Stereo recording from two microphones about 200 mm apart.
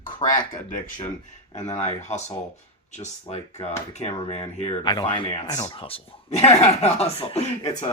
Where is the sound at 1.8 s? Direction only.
35° left (ahead or behind).